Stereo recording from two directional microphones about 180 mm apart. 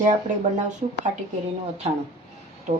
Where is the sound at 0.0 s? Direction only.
45° right (ahead or behind).